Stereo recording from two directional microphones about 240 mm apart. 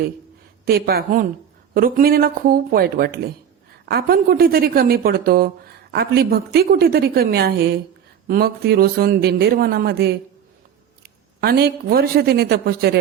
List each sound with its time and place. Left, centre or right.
0.6 s a woman's voice: right
11.3 s a woman's voice: right